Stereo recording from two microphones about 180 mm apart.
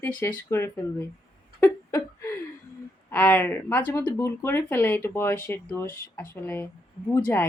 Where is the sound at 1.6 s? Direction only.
15° left (ahead or behind).